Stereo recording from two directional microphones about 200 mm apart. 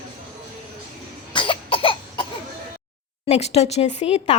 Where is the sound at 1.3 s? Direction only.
25° left (ahead or behind).